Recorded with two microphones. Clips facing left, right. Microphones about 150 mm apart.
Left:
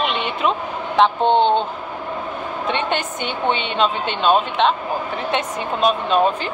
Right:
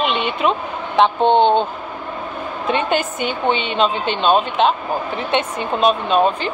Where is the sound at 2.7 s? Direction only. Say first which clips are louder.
Right 4 dB; 5° right (ahead or behind).